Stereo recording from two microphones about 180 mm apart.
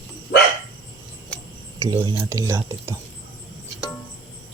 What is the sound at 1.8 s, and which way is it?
Speech, 25° right (ahead or behind).